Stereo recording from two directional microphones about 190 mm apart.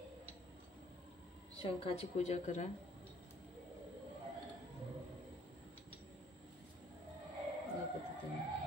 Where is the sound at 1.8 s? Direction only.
35° left (ahead or behind).